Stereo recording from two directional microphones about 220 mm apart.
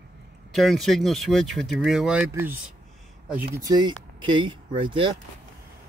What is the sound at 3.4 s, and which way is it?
Speech, 15° right (ahead or behind).